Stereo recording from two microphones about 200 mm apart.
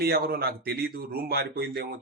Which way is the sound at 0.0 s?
50° right (ahead or behind).